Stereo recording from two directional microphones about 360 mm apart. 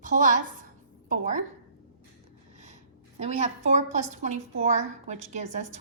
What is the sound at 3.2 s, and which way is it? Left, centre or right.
A woman's voice, centre.